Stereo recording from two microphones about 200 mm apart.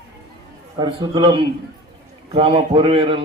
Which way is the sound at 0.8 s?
25° right (ahead or behind).